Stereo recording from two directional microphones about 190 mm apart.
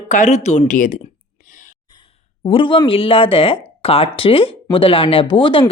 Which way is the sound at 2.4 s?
25° left (ahead or behind).